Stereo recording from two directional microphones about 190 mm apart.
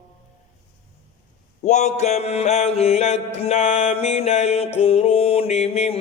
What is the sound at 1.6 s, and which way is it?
Mantra, 40° left (ahead or behind).